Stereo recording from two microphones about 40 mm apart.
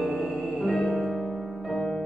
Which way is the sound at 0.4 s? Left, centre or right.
Centre.